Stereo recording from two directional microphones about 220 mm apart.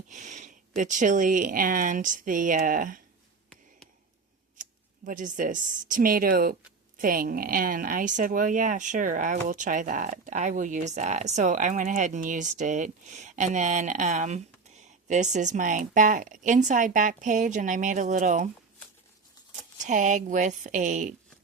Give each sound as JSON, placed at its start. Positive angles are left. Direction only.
{"t": 0.1, "sound": "a sound", "side_deg": -35}
{"t": 0.8, "sound": "speech", "side_deg": -35}
{"t": 5.0, "sound": "speech", "side_deg": -35}
{"t": 19.8, "sound": "speech", "side_deg": -35}